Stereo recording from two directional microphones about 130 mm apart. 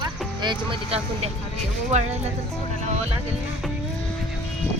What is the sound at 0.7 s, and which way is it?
Speech, 50° right (ahead or behind).